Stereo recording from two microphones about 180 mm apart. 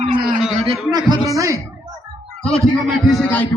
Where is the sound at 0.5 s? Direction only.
30° right (ahead or behind).